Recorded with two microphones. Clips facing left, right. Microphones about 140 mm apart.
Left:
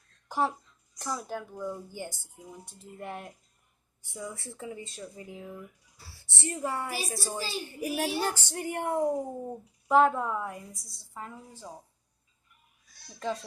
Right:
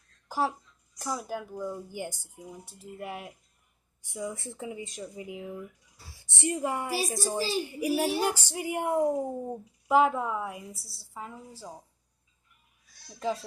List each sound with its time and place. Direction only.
0.3 s a woman's voice: 5° right (ahead or behind)
13.1 s speech: 10° right (ahead or behind)